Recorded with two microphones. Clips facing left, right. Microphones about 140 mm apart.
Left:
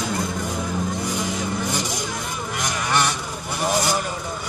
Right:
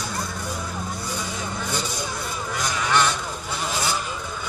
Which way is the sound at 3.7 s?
15° left (ahead or behind).